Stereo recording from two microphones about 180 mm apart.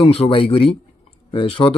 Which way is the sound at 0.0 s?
30° left (ahead or behind).